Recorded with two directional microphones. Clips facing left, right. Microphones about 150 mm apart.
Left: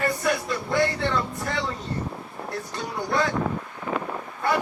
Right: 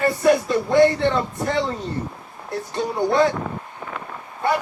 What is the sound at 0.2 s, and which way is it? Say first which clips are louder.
Speech: right 8 dB; 25° right (ahead or behind).